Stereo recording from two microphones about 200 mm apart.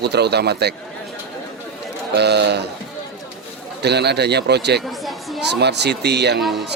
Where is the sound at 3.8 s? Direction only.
55° right (ahead or behind).